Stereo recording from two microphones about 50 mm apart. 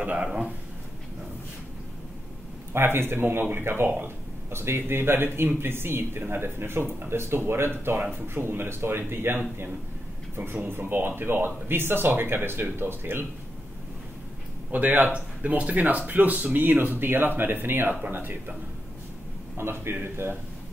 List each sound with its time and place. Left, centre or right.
0.0 s speech: right
2.7 s speech: right
4.5 s speech: right
14.7 s speech: right
19.5 s speech: right